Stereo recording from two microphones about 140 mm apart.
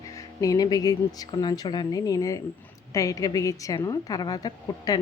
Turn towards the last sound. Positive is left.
turn(degrees=30)  # may be behind; listen again after turning